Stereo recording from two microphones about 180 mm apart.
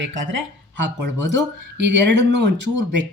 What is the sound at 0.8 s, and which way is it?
Speech, 80° right.